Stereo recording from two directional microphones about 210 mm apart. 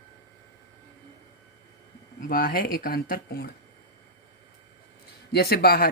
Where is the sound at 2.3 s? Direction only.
45° left (ahead or behind).